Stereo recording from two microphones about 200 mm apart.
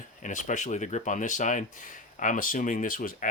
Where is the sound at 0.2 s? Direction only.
40° left (ahead or behind).